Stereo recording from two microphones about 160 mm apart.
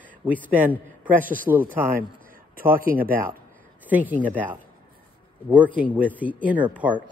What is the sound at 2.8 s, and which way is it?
Speech, 65° right (ahead or behind).